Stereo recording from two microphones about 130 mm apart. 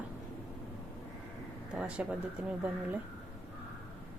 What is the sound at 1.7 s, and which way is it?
Speech, 10° right (ahead or behind).